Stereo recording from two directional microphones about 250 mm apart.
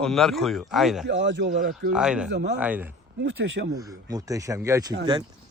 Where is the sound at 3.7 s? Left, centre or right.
Centre.